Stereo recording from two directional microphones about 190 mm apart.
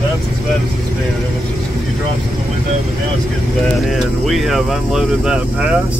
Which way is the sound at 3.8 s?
Centre (ahead or behind).